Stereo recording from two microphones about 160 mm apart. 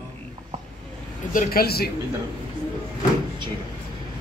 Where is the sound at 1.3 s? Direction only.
65° left (ahead or behind).